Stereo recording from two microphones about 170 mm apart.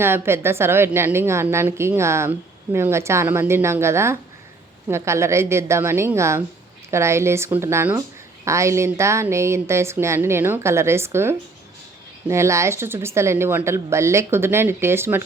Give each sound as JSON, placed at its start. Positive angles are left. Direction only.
{"t": 0.0, "sound": "a woman's voice", "side_deg": -15}